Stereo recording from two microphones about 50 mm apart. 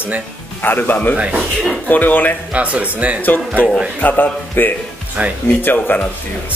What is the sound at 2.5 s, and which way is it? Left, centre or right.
Speech, right.